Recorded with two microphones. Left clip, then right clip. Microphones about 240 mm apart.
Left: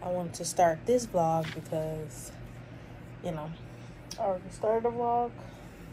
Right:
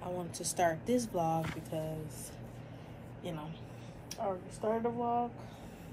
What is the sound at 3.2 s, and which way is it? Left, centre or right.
A woman's voice, centre.